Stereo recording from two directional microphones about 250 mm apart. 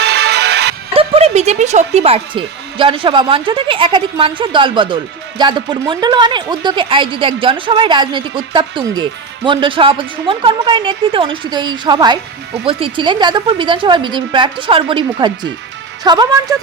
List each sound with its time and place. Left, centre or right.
0.0 s music: right
0.9 s a woman's voice: right